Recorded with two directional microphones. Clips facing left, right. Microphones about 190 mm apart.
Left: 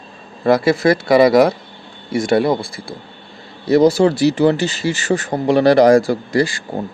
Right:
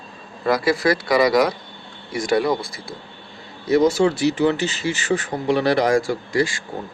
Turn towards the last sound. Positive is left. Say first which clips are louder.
# left 4 dB
turn(degrees=35)  # may be behind; listen again after turning